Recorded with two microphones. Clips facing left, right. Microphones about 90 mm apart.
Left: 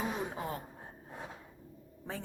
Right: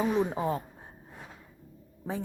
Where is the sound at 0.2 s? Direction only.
20° right (ahead or behind).